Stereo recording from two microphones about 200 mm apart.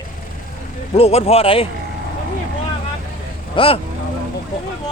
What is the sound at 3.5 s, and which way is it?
Speech, 30° left (ahead or behind).